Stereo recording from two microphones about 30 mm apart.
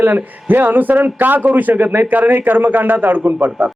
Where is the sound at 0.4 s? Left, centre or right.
Right.